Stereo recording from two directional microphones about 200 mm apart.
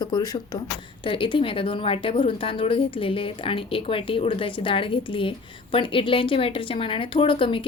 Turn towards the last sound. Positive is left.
turn(degrees=25)  # may be behind; listen again after turning